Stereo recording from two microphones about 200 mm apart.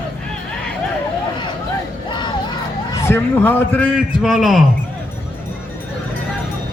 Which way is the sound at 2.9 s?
10° left (ahead or behind).